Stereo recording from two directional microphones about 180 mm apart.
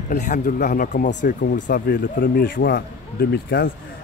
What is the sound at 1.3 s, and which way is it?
Speech, 70° left (ahead or behind).